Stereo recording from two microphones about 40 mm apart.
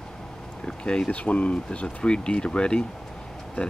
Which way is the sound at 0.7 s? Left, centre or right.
Centre.